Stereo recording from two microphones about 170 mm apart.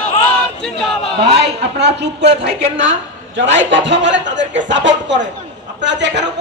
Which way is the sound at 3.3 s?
90° right.